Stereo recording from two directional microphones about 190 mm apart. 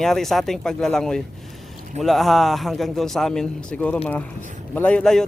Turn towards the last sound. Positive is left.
turn(degrees=5)  # may be behind; listen again after turning